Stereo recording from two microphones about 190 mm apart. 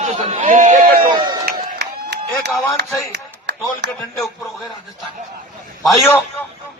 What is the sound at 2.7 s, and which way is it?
Speech, 65° right (ahead or behind).